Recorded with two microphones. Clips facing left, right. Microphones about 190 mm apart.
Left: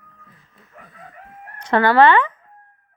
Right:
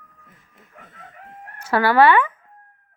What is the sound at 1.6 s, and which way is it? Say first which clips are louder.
Speech: left 2 dB; 10° right (ahead or behind).